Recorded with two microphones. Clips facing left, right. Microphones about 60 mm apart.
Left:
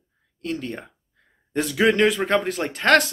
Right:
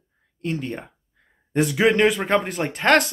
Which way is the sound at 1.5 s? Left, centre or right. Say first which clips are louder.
Right 1 dB; centre.